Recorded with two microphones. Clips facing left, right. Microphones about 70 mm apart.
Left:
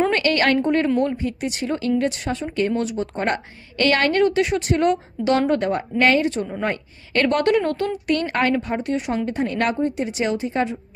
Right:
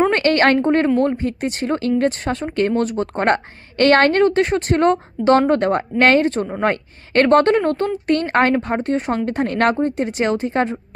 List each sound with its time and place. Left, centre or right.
0.1 s a woman's voice: right